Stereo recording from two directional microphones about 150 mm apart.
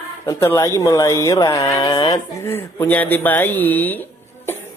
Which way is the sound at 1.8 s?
30° left (ahead or behind).